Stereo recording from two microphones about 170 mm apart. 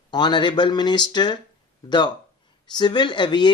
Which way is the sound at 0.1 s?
25° left (ahead or behind).